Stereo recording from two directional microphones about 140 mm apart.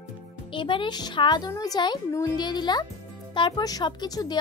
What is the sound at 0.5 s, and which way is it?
Speech, 35° left (ahead or behind).